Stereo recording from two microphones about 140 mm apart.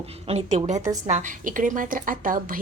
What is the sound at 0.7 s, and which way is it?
Speech, 25° right (ahead or behind).